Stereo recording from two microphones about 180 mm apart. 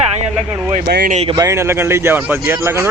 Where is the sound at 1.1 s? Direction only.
35° right (ahead or behind).